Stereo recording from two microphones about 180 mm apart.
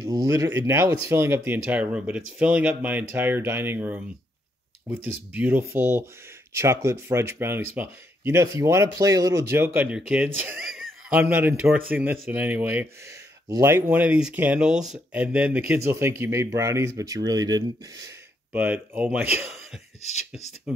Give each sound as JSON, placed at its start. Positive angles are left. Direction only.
{"t": 0.0, "sound": "speech", "side_deg": -20}
{"t": 18.5, "sound": "speech", "side_deg": -10}